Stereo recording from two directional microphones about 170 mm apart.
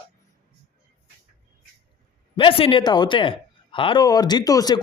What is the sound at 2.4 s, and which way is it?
Speech, 30° left (ahead or behind).